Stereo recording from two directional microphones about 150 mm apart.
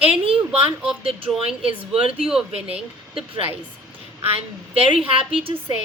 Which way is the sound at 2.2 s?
5° right (ahead or behind).